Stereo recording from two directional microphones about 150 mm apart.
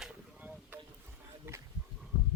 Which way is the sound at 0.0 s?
5° right (ahead or behind).